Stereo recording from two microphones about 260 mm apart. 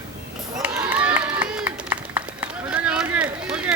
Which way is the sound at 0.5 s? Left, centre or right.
Centre.